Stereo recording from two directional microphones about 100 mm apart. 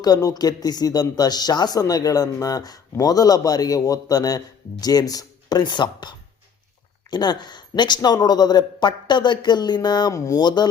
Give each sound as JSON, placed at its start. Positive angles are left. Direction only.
{"t": 0.0, "sound": "a man's voice", "side_deg": 40}
{"t": 10.1, "sound": "a man's voice", "side_deg": 30}
{"t": 10.4, "sound": "speech", "side_deg": 45}